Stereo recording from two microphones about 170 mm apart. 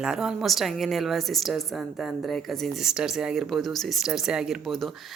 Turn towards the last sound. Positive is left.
turn(degrees=0)  # may be behind; listen again after turning